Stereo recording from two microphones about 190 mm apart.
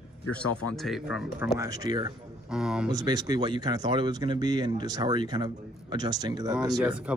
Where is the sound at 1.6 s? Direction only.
20° right (ahead or behind).